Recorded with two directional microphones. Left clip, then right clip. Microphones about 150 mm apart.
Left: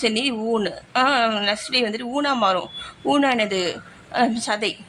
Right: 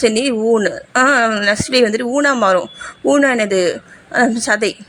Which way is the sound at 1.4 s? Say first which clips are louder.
Right 8 dB; 35° right (ahead or behind).